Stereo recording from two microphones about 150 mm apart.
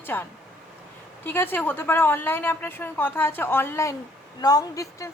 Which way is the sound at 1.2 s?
15° left (ahead or behind).